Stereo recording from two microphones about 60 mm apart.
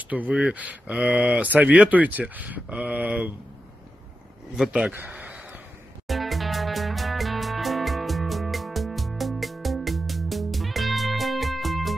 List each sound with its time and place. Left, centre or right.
0.3 s speech: centre
0.6 s speech: right
4.6 s speech: centre
4.9 s a sound: right
6.0 s music: centre